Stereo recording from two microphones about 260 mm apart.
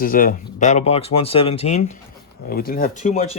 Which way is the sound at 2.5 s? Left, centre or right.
Left.